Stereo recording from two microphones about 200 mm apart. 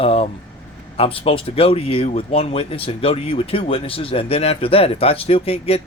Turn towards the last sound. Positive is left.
turn(degrees=30)  # may be behind; listen again after turning